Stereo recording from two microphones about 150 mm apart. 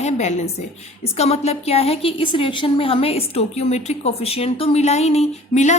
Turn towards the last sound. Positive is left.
turn(degrees=50)  # may be behind; listen again after turning